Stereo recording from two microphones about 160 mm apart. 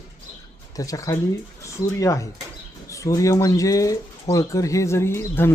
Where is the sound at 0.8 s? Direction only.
20° left (ahead or behind).